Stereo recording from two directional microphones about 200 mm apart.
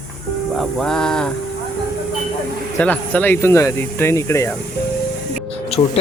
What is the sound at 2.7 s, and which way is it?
Speech, 5° left (ahead or behind).